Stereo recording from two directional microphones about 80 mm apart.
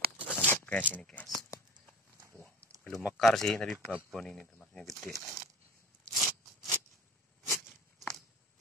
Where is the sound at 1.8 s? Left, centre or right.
Left.